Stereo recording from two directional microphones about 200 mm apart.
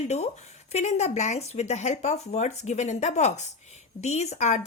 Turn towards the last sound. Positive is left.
turn(degrees=35)  # may be behind; listen again after turning